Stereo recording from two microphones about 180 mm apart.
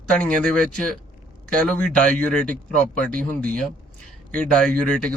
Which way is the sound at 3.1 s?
55° right (ahead or behind).